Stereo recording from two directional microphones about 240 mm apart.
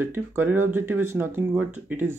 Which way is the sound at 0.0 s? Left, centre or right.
Centre.